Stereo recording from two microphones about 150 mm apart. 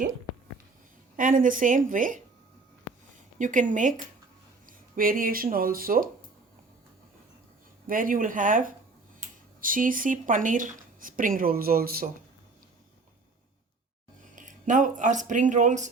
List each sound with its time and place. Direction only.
1.1 s speech: 65° right (ahead or behind)
3.3 s speech: 60° right (ahead or behind)
4.9 s speech: 70° right (ahead or behind)
7.9 s speech: 65° right (ahead or behind)
14.3 s speech: 60° right (ahead or behind)